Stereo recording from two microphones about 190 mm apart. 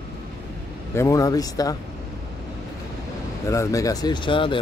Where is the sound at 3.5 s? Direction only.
15° left (ahead or behind).